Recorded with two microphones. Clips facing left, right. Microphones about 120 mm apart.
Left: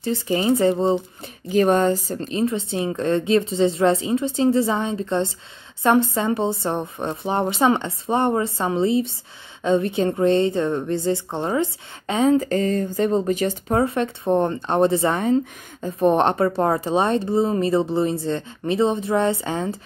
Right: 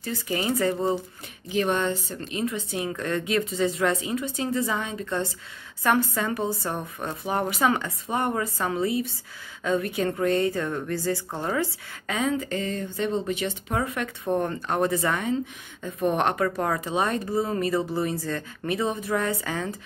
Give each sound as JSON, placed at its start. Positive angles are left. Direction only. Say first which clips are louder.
{"t": 0.0, "sound": "a woman's voice", "louder": "left 7 dB", "side_deg": 25}
{"t": 1.5, "sound": "a woman's voice", "louder": "left 7 dB", "side_deg": 40}